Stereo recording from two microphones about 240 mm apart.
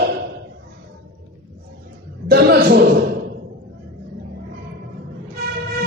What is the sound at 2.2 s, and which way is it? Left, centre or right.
Chuckle, right.